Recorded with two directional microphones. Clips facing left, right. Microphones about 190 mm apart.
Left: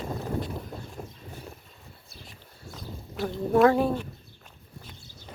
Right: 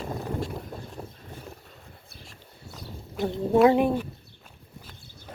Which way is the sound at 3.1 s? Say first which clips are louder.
Right 1 dB; 25° right (ahead or behind).